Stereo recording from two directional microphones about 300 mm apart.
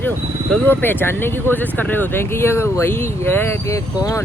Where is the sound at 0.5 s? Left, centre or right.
Centre.